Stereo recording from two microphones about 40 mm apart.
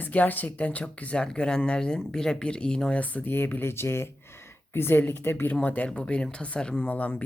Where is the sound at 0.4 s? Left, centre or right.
Left.